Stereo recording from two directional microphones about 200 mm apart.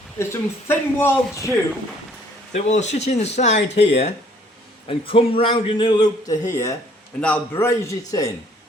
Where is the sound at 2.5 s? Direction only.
35° left (ahead or behind); by 8.3 s 15° left (ahead or behind).